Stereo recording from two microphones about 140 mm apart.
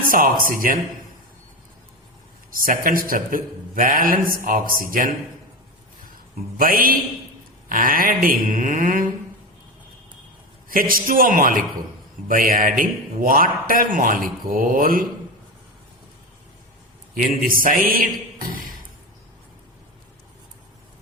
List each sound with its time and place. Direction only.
0.1 s speech: 85° right
2.5 s a man's voice: 90° right
6.6 s a man's voice: 90° right
7.7 s mantra: 80° right
10.7 s a man's voice: 90° right
17.2 s a man's voice: 85° right